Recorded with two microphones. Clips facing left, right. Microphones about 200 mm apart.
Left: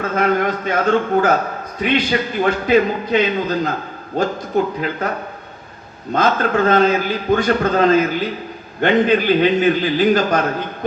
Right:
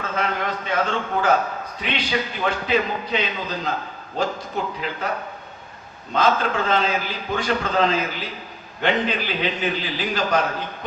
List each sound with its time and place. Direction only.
0.0 s a sound: 50° left (ahead or behind)
1.8 s a man's voice: 50° left (ahead or behind)
6.1 s a man's voice: 45° left (ahead or behind)